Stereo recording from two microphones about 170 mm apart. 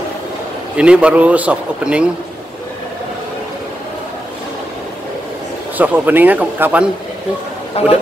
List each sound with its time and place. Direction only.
0.7 s a man's voice: 5° right (ahead or behind)
5.8 s a man's voice: 10° right (ahead or behind)
7.8 s speech: 35° left (ahead or behind)